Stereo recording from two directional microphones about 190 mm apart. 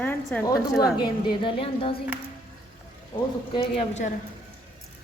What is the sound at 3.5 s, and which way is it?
Speech, 30° left (ahead or behind).